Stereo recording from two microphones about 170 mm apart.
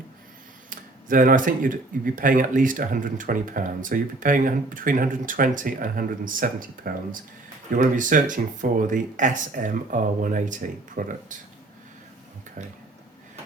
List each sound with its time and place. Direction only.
0.7 s speech: 50° right (ahead or behind)